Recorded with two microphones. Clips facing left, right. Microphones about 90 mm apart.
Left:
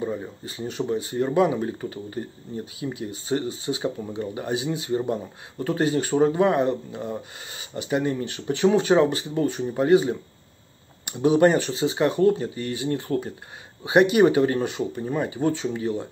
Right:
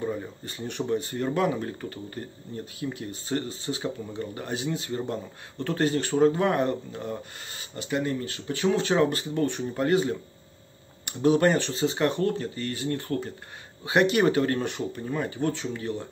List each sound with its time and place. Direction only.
0.0 s speech: 10° left (ahead or behind)
2.8 s speech: 5° left (ahead or behind)
7.7 s speech: 15° left (ahead or behind)
11.1 s speech: 15° left (ahead or behind)